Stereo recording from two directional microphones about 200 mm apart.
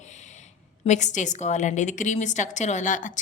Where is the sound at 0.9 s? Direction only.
35° left (ahead or behind).